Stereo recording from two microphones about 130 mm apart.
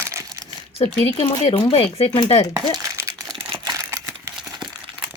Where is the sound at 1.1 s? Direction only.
50° left (ahead or behind).